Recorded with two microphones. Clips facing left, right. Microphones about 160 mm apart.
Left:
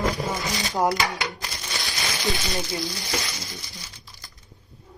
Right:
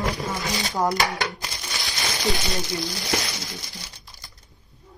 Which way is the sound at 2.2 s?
20° right (ahead or behind).